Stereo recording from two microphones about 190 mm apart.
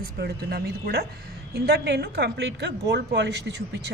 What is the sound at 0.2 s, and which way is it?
A woman's voice, 55° right (ahead or behind).